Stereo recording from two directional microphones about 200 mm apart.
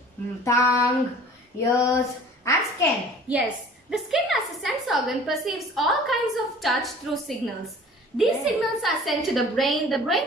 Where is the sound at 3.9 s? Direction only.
Centre (ahead or behind).